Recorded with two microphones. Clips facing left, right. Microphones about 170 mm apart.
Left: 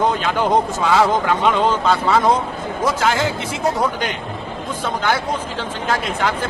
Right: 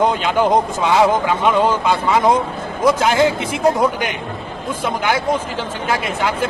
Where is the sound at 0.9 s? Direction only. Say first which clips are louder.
Right 2 dB; 15° right (ahead or behind).